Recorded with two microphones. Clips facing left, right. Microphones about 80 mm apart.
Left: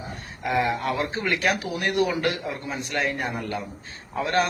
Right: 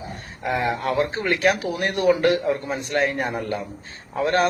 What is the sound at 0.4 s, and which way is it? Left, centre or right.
Speech, right.